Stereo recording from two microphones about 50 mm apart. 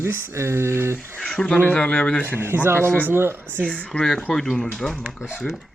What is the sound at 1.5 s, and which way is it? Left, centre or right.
Speech, left.